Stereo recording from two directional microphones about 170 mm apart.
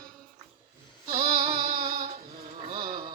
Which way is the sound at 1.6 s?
55° right (ahead or behind).